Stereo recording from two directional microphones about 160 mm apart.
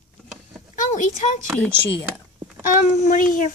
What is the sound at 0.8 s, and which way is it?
Speech, 50° left (ahead or behind).